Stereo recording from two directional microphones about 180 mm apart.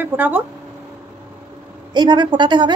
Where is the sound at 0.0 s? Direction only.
10° right (ahead or behind).